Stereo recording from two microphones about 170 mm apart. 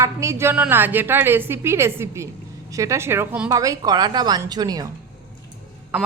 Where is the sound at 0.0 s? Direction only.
15° right (ahead or behind).